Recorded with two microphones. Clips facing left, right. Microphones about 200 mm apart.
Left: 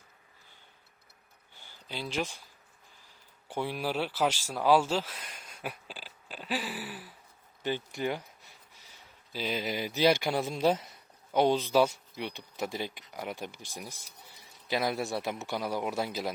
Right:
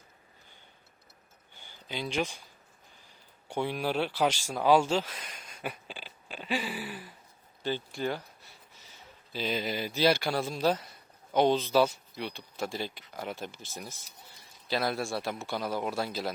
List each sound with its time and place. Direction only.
1.9 s speech: 5° left (ahead or behind)
3.5 s speech: 5° left (ahead or behind)
5.4 s a sound: 5° left (ahead or behind)
7.6 s speech: 15° left (ahead or behind)
9.3 s speech: 10° left (ahead or behind)